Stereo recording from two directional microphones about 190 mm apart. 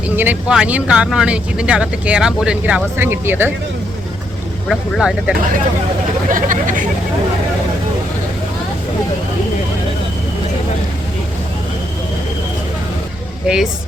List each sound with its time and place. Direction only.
0.2 s speech: 5° right (ahead or behind)
4.7 s speech: centre (ahead or behind)
6.2 s a sound: 45° right (ahead or behind)